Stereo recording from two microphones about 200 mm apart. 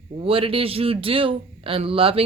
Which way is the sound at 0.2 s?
30° right (ahead or behind).